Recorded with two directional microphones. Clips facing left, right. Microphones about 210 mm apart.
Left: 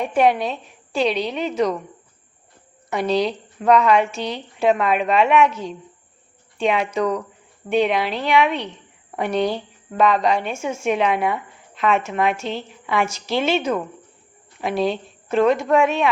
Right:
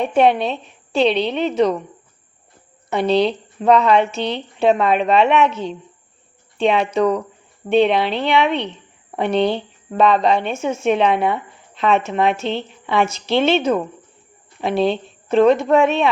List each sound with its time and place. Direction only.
0.0 s a woman's voice: 25° right (ahead or behind)
2.9 s a woman's voice: 25° right (ahead or behind)